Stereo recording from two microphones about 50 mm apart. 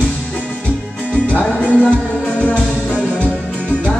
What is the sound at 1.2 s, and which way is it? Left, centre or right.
Music, left.